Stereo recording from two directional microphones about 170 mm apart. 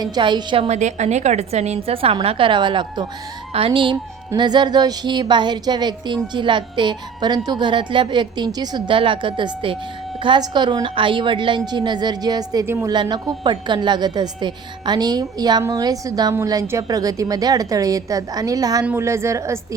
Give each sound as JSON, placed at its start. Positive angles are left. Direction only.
{"t": 0.0, "sound": "speech", "side_deg": -25}
{"t": 0.8, "sound": "a woman's voice", "side_deg": -45}